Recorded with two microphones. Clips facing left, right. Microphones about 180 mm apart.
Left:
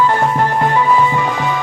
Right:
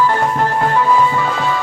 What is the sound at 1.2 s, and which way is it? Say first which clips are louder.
Music: even; 15° left (ahead or behind).